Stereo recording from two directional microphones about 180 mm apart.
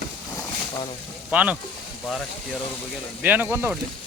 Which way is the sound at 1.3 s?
10° right (ahead or behind).